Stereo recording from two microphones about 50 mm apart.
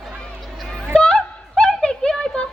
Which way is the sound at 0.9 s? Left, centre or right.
Left.